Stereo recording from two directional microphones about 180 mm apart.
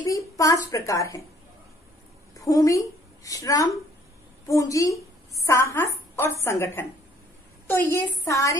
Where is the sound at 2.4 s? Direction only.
20° left (ahead or behind).